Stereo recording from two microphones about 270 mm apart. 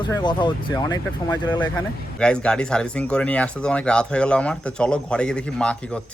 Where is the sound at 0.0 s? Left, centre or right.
Centre.